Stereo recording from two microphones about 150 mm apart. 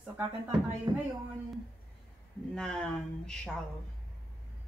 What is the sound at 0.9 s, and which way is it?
Speech, 25° right (ahead or behind).